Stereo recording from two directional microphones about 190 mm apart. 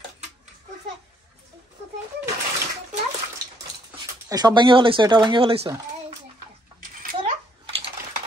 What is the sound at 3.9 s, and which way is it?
Speech, 25° right (ahead or behind).